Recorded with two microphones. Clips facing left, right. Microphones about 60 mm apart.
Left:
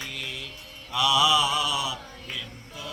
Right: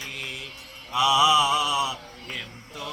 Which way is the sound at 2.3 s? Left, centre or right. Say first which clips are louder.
Right 2 dB; right.